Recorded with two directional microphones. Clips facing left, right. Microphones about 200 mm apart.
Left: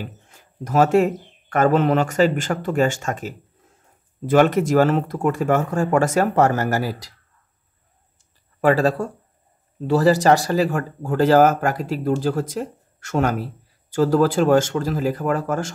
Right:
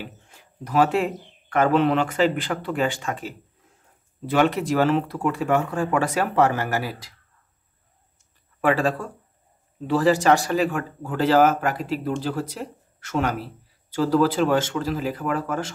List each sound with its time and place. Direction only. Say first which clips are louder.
0.7 s speech: left 4 dB; 45° left (ahead or behind)
8.5 s speech: left 4 dB; 40° left (ahead or behind)